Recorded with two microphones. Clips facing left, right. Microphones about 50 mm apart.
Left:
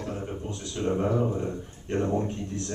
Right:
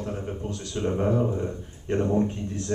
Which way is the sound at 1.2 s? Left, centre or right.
Centre.